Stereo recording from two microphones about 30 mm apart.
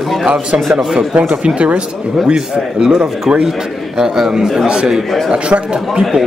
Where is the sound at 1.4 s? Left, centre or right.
Right.